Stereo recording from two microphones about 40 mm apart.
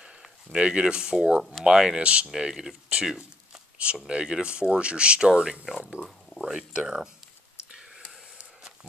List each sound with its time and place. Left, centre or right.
0.0 s speech: right
2.0 s speech: right
2.2 s speech: centre
3.7 s speech: right
6.7 s speech: right